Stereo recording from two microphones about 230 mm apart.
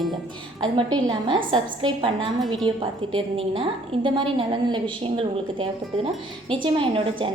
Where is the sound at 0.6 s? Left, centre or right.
Centre.